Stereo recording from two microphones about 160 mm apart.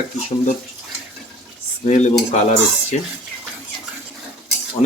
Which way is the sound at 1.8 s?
45° left (ahead or behind).